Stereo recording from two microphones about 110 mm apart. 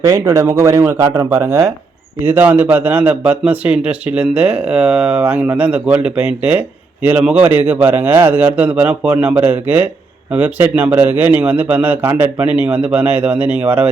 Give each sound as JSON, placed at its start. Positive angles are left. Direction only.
{"t": 0.0, "sound": "speech", "side_deg": -30}
{"t": 2.2, "sound": "a man's voice", "side_deg": -15}